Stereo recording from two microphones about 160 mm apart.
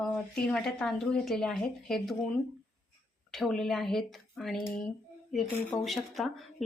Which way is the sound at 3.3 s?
Centre (ahead or behind).